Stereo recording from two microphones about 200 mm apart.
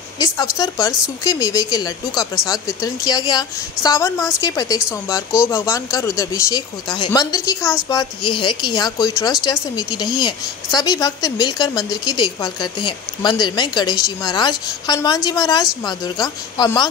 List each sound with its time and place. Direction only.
0.4 s speech: 20° left (ahead or behind)